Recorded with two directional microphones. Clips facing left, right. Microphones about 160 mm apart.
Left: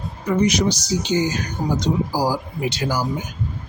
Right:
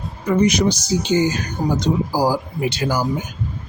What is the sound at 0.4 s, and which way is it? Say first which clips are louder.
Speech: right 2 dB; 55° right (ahead or behind).